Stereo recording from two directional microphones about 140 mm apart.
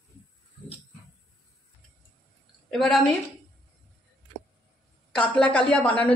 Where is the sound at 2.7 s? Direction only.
Centre (ahead or behind).